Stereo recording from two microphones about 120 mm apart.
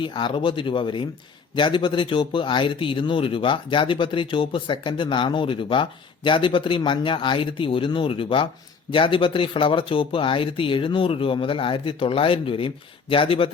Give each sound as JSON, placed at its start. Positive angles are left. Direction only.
{"t": 0.0, "sound": "a man's voice", "side_deg": 40}